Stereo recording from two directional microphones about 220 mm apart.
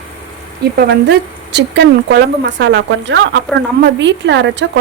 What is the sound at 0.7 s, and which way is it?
A woman's voice, 45° right (ahead or behind).